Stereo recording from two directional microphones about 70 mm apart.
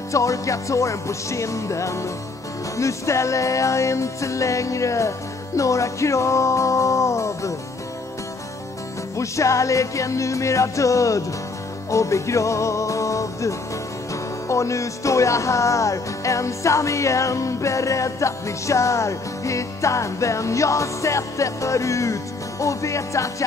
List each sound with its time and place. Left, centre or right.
0.1 s music: left
9.1 s music: left